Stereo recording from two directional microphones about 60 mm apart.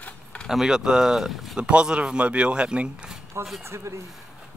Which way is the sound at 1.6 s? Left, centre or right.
Centre.